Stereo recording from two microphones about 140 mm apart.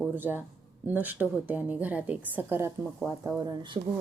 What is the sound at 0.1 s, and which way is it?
A man's voice, 15° right (ahead or behind).